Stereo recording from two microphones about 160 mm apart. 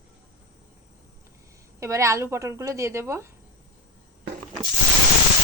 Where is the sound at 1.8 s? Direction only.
20° right (ahead or behind).